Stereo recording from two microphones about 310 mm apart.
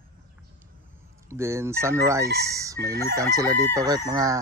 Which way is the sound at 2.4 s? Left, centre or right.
Centre.